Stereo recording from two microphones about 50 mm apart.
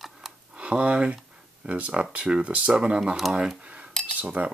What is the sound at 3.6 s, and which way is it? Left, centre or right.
Cutlery, right.